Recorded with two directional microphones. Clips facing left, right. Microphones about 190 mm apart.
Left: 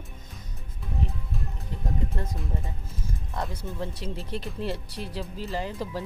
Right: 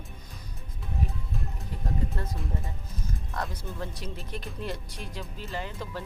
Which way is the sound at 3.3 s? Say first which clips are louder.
Left 2 dB; 25° left (ahead or behind).